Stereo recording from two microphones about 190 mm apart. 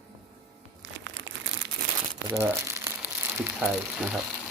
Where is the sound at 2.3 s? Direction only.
15° right (ahead or behind).